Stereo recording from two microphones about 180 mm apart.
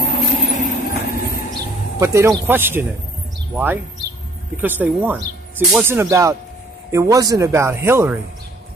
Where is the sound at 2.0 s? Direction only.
15° right (ahead or behind).